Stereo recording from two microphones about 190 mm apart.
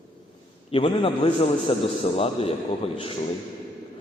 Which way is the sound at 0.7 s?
30° left (ahead or behind).